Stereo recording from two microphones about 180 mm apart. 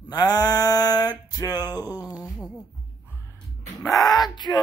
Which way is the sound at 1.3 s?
20° left (ahead or behind).